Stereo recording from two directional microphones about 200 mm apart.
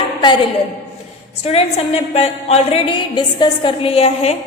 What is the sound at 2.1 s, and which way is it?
A woman's voice, 30° left (ahead or behind).